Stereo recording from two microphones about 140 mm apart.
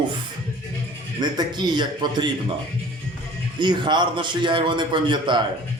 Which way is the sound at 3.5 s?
35° right (ahead or behind).